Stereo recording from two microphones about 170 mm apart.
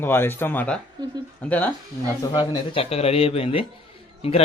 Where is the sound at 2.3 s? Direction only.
30° left (ahead or behind).